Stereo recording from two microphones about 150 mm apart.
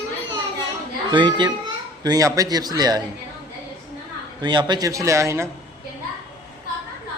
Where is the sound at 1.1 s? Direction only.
30° right (ahead or behind).